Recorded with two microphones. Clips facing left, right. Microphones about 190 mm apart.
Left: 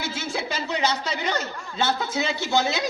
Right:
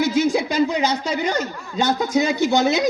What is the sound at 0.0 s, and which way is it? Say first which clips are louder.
A man's voice: right 11 dB; 15° right (ahead or behind).